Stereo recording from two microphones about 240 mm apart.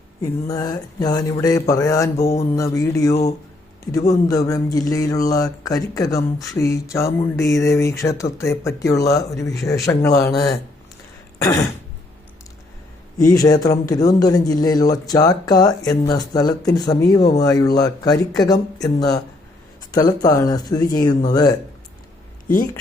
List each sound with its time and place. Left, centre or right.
0.2 s speech: centre
11.3 s throat clearing: centre
13.2 s speech: centre